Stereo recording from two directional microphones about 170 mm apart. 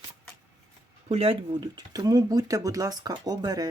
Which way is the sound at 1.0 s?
35° right (ahead or behind).